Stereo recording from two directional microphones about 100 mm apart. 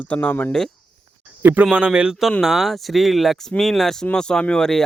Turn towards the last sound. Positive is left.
turn(degrees=5)  # may be behind; listen again after turning